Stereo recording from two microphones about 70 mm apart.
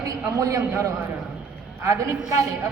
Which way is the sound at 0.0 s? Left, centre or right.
Right.